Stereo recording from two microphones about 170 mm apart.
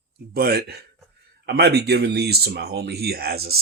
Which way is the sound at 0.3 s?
65° right (ahead or behind).